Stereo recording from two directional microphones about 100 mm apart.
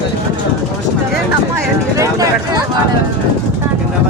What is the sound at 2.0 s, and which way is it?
Vehicle, 35° right (ahead or behind).